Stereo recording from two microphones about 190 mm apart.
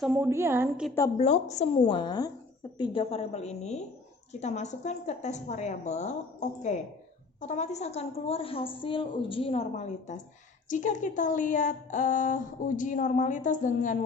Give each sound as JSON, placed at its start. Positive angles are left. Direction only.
{"t": 0.1, "sound": "a woman's voice", "side_deg": -10}
{"t": 1.2, "sound": "a woman's voice", "side_deg": 35}